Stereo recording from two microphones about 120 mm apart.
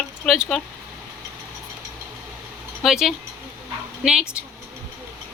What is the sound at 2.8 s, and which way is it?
A man's voice, 5° right (ahead or behind).